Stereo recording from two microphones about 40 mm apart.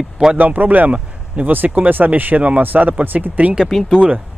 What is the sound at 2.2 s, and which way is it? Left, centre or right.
Speech, right.